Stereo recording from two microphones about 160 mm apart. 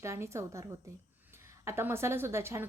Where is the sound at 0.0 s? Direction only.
15° right (ahead or behind).